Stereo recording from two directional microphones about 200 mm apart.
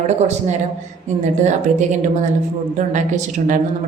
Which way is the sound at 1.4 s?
35° right (ahead or behind).